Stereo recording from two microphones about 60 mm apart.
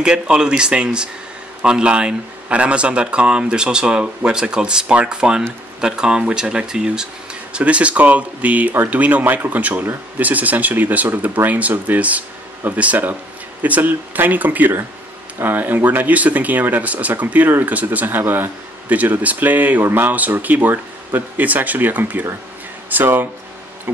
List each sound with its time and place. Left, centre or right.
0.0 s a man's voice: centre; by 23.1 s right